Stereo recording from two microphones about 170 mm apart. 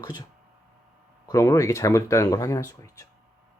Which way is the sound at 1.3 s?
15° left (ahead or behind).